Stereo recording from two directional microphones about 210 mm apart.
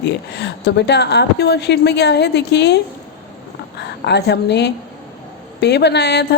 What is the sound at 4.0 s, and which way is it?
A woman's voice, 50° left (ahead or behind).